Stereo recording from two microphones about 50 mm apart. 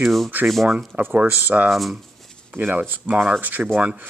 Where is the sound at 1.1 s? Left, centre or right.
Right.